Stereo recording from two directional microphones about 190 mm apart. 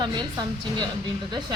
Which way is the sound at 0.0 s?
25° right (ahead or behind).